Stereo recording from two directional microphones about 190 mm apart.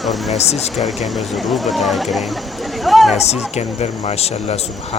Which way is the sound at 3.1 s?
35° left (ahead or behind).